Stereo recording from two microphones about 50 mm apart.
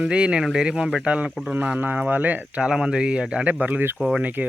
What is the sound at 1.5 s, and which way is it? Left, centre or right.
Speech, right.